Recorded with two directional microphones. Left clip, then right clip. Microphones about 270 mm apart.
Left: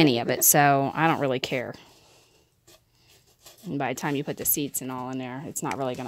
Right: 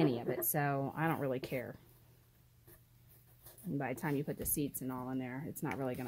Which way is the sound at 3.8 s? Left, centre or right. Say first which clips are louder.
Left 10 dB; left.